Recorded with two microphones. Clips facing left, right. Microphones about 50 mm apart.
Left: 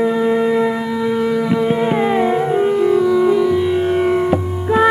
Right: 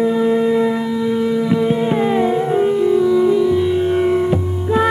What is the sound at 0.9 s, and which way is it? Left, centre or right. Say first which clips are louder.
Music: even; left.